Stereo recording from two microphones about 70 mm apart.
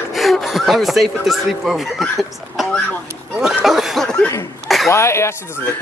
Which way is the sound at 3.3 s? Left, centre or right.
Centre.